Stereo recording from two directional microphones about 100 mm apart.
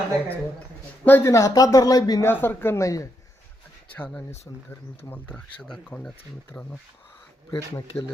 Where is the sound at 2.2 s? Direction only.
20° left (ahead or behind).